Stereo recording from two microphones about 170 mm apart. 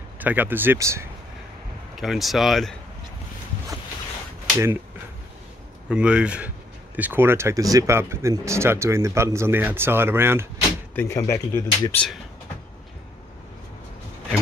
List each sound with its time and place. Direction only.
0.2 s speech: 10° right (ahead or behind)
2.0 s speech: centre (ahead or behind)
4.6 s speech: 15° right (ahead or behind)
5.9 s speech: 5° right (ahead or behind)
11.0 s speech: 15° left (ahead or behind)